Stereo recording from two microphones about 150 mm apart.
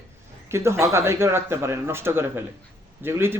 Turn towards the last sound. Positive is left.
turn(degrees=-15)  # may be behind; listen again after turning